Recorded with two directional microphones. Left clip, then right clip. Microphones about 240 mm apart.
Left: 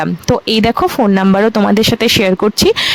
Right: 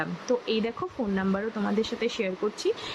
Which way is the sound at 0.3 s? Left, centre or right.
Left.